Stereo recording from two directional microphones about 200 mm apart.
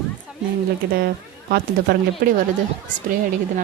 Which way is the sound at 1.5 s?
50° right (ahead or behind).